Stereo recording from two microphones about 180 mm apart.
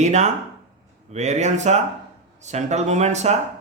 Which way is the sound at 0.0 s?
40° right (ahead or behind).